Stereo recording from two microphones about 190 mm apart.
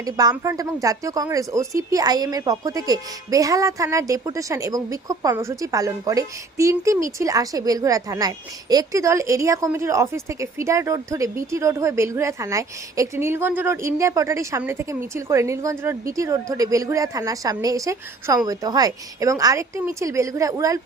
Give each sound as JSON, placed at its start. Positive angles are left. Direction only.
{"t": 0.0, "sound": "speech", "side_deg": -20}